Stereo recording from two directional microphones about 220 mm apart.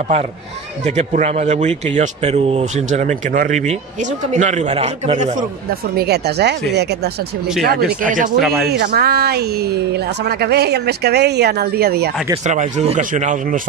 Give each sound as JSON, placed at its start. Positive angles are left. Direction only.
{"t": 0.8, "sound": "speech", "side_deg": -30}
{"t": 8.4, "sound": "speech", "side_deg": 0}
{"t": 8.6, "sound": "speech", "side_deg": -45}
{"t": 12.4, "sound": "speech", "side_deg": -35}